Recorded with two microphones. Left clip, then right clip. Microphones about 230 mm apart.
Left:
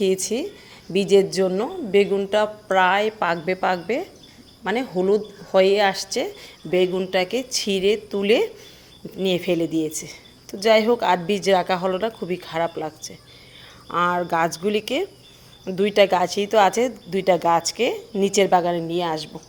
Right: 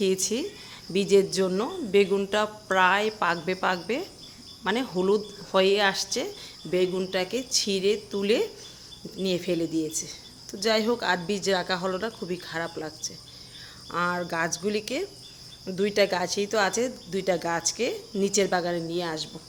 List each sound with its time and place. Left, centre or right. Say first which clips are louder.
0.0 s speech: left 4 dB; centre